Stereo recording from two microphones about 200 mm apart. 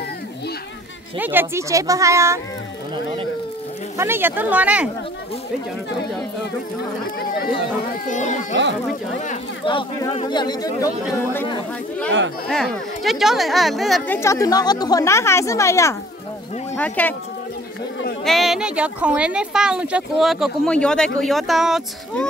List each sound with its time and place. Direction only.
1.1 s speech: 10° right (ahead or behind)
4.0 s speech: 10° right (ahead or behind)
7.2 s speech: 50° left (ahead or behind)
8.1 s a child's voice: 40° left (ahead or behind)
9.7 s speech: 20° left (ahead or behind)
12.4 s speech: centre (ahead or behind)
18.2 s speech: centre (ahead or behind)